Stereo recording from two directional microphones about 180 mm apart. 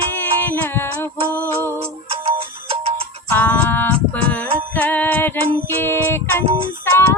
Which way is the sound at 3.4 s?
10° left (ahead or behind).